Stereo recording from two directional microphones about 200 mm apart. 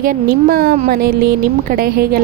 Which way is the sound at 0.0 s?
45° right (ahead or behind).